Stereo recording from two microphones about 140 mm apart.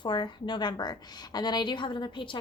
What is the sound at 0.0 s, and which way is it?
A woman's voice, 35° left (ahead or behind).